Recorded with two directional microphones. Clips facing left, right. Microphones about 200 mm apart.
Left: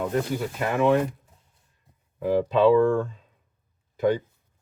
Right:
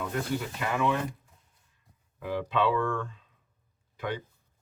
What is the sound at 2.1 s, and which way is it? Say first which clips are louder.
Speech: left 8 dB; 40° left (ahead or behind).